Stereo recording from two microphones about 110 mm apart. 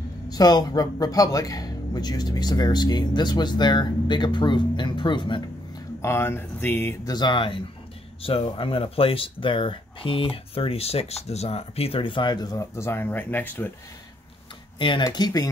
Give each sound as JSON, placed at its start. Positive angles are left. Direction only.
{"t": 0.3, "sound": "speech", "side_deg": 35}
{"t": 6.0, "sound": "speech", "side_deg": 20}
{"t": 7.1, "sound": "speech", "side_deg": 45}
{"t": 8.2, "sound": "speech", "side_deg": 60}
{"t": 12.7, "sound": "speech", "side_deg": 20}
{"t": 14.8, "sound": "speech", "side_deg": 50}
{"t": 15.0, "sound": "speech", "side_deg": 35}